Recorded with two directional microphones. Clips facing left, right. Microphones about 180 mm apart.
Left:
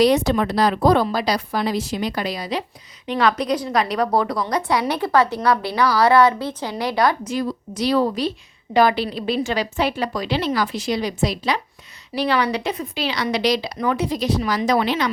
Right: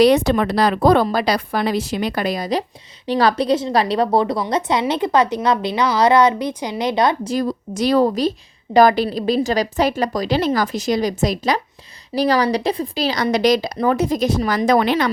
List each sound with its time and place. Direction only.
0.0 s a woman's voice: 65° right (ahead or behind); by 7.2 s 20° right (ahead or behind)
7.3 s speech: 45° right (ahead or behind)